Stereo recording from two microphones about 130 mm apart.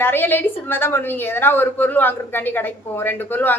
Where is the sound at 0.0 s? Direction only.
15° left (ahead or behind).